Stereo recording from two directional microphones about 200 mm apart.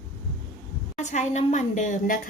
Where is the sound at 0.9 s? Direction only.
35° left (ahead or behind).